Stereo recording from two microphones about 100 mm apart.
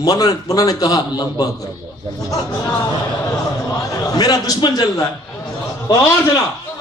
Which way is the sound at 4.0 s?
40° left (ahead or behind).